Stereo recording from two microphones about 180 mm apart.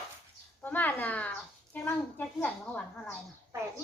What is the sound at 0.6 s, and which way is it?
A child's voice, 10° left (ahead or behind).